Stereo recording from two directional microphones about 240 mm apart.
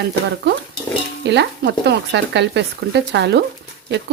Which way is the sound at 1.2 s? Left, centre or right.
Right.